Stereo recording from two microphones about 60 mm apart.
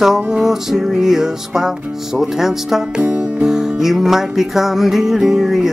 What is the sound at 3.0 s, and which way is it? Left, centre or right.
Music, right.